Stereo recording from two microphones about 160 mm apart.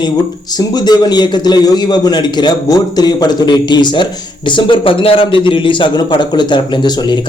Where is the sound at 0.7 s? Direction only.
25° left (ahead or behind).